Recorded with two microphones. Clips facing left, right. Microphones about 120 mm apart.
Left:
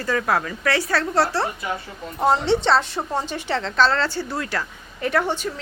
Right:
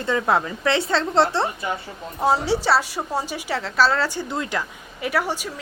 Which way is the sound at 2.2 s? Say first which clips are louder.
Left 1 dB; 5° right (ahead or behind).